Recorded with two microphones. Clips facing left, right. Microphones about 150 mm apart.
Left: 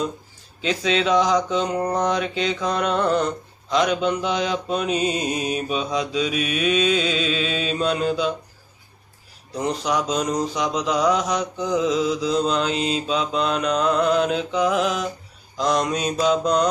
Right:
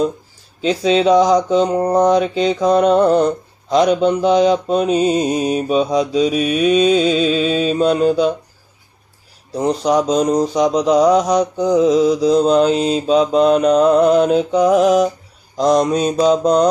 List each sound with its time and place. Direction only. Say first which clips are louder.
0.6 s mantra: right 7 dB; 35° right (ahead or behind)
9.6 s mantra: right 8 dB; 35° right (ahead or behind)